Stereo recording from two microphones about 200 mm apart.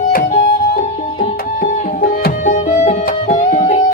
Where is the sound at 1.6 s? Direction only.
45° left (ahead or behind).